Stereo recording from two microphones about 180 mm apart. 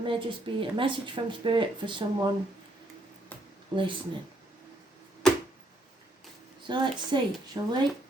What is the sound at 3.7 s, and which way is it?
Speech, 25° right (ahead or behind).